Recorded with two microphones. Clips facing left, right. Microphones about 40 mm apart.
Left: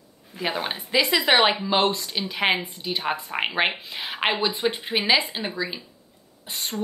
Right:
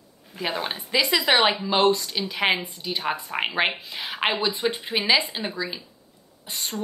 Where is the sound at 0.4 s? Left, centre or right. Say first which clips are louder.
Left 1 dB; centre.